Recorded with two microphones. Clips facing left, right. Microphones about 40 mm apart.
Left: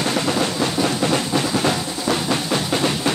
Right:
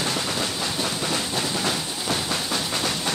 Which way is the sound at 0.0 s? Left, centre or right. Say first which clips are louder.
Left 6 dB; left.